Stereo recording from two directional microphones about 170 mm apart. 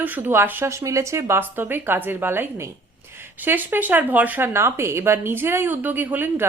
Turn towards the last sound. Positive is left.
turn(degrees=-10)  # may be behind; listen again after turning